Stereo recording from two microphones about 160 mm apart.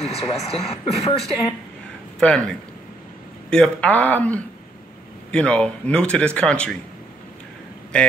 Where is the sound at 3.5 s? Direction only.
5° left (ahead or behind).